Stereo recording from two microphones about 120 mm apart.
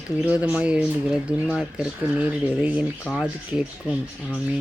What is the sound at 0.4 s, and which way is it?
Speech, 10° right (ahead or behind).